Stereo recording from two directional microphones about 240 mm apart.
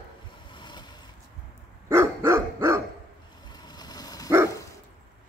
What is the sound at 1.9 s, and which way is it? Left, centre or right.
Dog, centre.